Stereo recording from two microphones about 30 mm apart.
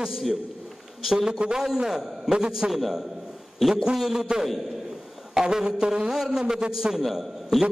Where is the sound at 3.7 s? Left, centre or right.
Right.